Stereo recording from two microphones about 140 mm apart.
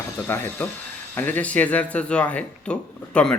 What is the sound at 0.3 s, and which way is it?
Speech, 15° left (ahead or behind).